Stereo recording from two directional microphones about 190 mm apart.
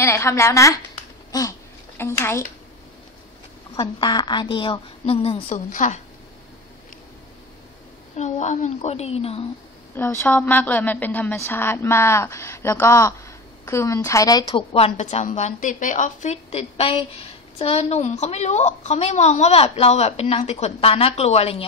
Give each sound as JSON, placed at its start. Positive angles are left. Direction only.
{"t": 0.0, "sound": "a woman's voice", "side_deg": 15}
{"t": 3.7, "sound": "a woman's voice", "side_deg": 25}
{"t": 5.7, "sound": "a woman's voice", "side_deg": 40}
{"t": 8.2, "sound": "a woman's voice", "side_deg": 40}
{"t": 9.9, "sound": "a woman's voice", "side_deg": 10}